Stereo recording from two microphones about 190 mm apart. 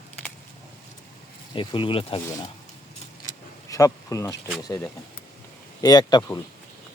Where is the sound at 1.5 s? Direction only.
25° left (ahead or behind).